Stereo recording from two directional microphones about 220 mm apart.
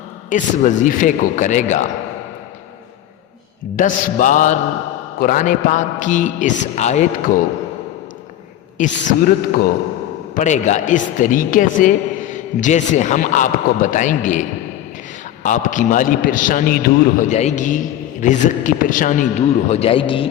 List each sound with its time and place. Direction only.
0.3 s a man's voice: 35° left (ahead or behind)
3.8 s a man's voice: 35° left (ahead or behind)
8.8 s a man's voice: 40° left (ahead or behind)
15.4 s a man's voice: 35° left (ahead or behind)